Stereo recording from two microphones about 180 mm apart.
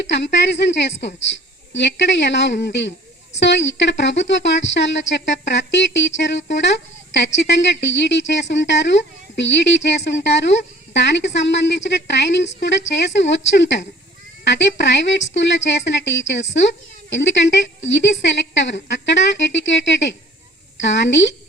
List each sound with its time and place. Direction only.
0.0 s a woman's voice: 75° left (ahead or behind)